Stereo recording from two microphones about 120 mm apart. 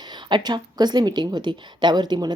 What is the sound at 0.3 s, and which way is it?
A woman's voice, 40° right (ahead or behind).